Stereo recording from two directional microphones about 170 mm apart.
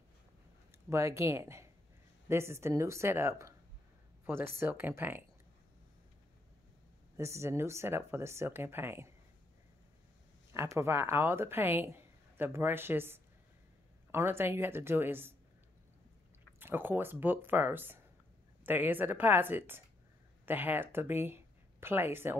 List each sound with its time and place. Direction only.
0.7 s speech: 15° right (ahead or behind)
7.2 s speech: 15° right (ahead or behind)
10.5 s speech: 15° right (ahead or behind)
16.5 s speech: 10° right (ahead or behind)